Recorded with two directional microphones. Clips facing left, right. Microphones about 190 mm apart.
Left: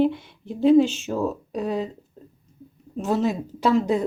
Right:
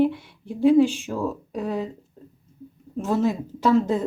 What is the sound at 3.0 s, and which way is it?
Speech, 20° left (ahead or behind).